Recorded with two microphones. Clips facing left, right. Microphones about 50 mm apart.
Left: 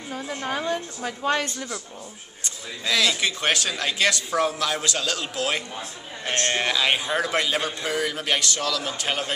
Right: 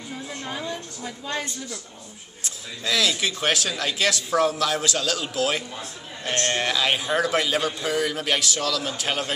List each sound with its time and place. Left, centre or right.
0.7 s a woman's voice: left
2.8 s a man's voice: centre